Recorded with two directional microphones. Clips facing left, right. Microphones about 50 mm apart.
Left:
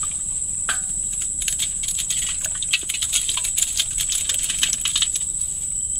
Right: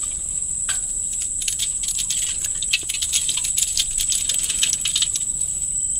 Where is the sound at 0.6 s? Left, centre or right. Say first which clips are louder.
Left 6 dB; centre.